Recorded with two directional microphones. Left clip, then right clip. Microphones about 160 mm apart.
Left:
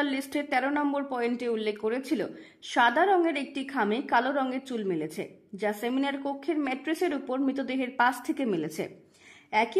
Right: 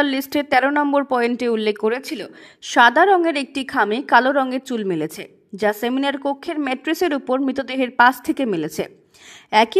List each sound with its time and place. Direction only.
0.0 s a woman's voice: 35° right (ahead or behind)